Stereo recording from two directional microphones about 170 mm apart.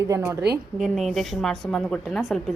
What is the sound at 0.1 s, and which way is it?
Speech, 20° right (ahead or behind).